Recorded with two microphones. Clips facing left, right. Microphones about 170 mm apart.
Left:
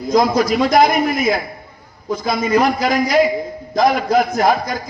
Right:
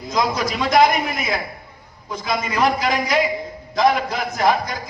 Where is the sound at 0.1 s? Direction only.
45° left (ahead or behind).